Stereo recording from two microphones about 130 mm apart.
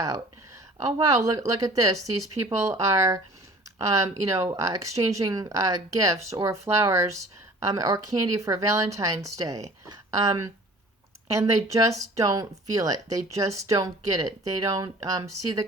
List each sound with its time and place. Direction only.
0.8 s speech: 25° right (ahead or behind)